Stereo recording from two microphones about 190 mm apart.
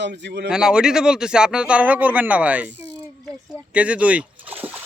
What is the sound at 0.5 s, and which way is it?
Speech, 5° right (ahead or behind).